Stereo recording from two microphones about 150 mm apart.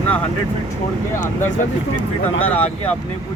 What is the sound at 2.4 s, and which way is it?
Speech, 10° left (ahead or behind).